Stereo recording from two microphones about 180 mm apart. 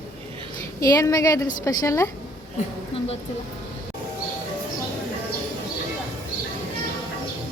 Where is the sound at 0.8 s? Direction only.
20° left (ahead or behind).